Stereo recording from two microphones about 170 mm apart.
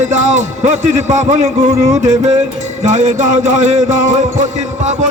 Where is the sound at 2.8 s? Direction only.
45° right (ahead or behind).